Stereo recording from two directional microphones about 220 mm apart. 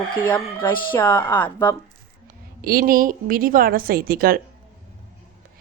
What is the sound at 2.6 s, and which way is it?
Speech, 40° right (ahead or behind).